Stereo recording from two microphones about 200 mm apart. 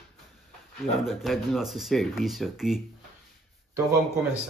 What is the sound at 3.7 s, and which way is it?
Speech, 15° right (ahead or behind).